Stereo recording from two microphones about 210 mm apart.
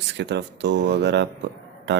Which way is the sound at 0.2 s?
55° right (ahead or behind).